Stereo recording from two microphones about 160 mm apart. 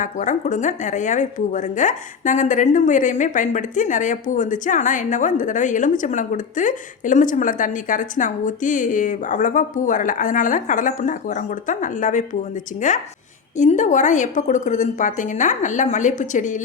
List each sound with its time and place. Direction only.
0.0 s speech: 50° left (ahead or behind)